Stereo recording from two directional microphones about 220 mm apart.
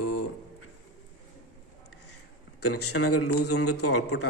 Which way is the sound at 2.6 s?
90° left.